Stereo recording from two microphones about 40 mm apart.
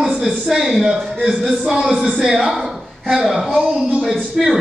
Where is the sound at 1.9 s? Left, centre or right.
Centre.